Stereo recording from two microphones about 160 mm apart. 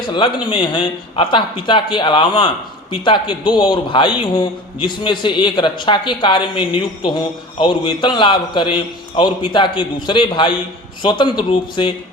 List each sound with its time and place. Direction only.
0.4 s a man's voice: 30° left (ahead or behind)